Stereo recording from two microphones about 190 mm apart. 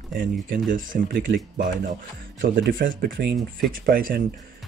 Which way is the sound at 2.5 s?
50° right (ahead or behind).